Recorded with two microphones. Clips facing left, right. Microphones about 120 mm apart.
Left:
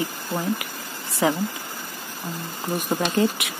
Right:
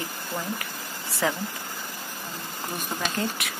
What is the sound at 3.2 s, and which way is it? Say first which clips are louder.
Speech: left 9 dB; 15° left (ahead or behind).